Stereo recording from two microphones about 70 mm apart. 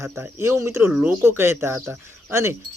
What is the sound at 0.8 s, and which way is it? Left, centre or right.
Speech, centre.